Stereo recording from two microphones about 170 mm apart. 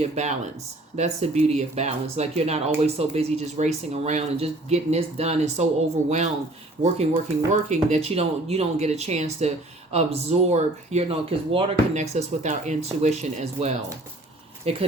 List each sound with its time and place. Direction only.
0.0 s speech: 40° right (ahead or behind)
6.8 s speech: 40° right (ahead or behind)